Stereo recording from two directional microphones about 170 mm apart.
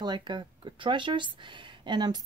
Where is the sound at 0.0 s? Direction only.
25° right (ahead or behind).